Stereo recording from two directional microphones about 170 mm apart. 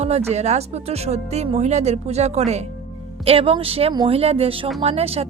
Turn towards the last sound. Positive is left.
turn(degrees=-35)  # may be behind; listen again after turning